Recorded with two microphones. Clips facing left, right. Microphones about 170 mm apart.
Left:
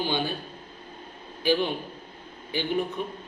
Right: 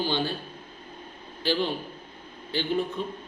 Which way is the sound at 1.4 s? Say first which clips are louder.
Left 2 dB; 15° left (ahead or behind).